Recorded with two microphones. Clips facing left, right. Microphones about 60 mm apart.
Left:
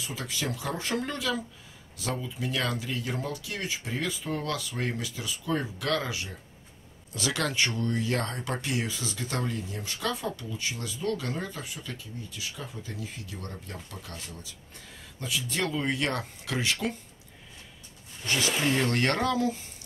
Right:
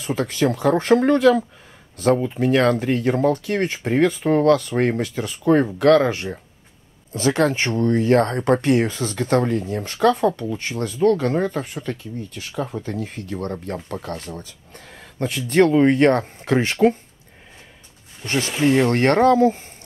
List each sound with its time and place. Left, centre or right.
0.0 s speech: right
7.1 s speech: right
18.2 s speech: right
18.6 s speech: right
18.9 s speech: right